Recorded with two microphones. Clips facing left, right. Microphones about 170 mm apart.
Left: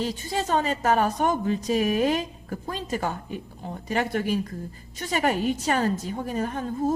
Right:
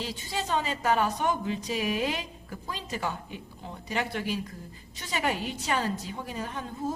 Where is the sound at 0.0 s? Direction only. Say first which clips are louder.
Left 6 dB; 45° left (ahead or behind).